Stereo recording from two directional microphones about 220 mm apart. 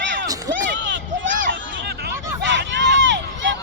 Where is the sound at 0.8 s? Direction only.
55° right (ahead or behind).